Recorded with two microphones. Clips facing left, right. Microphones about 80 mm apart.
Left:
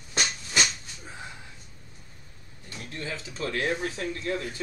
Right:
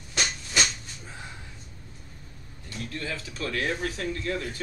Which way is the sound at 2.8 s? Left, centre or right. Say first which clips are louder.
Right 2 dB; left.